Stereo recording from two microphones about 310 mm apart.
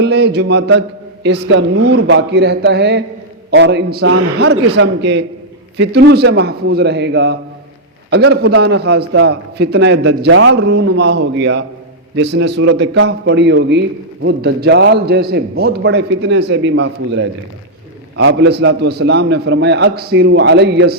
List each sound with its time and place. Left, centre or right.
0.0 s a man's voice: right